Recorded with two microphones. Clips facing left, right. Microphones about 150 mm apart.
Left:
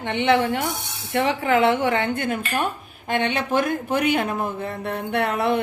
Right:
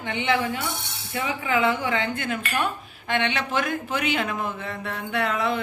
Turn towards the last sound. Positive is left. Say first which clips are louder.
# left 4 dB
turn(degrees=60)  # may be behind; listen again after turning